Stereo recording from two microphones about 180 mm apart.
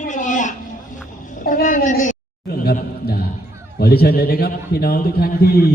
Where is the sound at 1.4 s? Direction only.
50° left (ahead or behind).